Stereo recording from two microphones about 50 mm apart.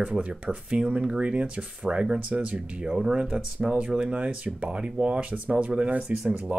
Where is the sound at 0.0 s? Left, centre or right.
Right.